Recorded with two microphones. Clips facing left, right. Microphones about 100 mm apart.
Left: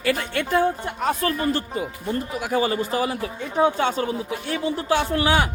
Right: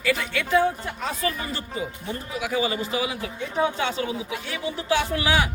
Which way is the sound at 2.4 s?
45° left (ahead or behind).